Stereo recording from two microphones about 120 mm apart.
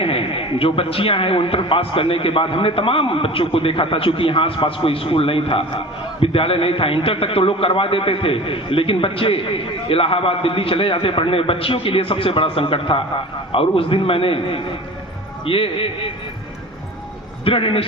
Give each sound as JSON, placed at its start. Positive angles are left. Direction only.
{"t": 0.0, "sound": "a man's voice", "side_deg": 50}
{"t": 17.4, "sound": "a man's voice", "side_deg": 50}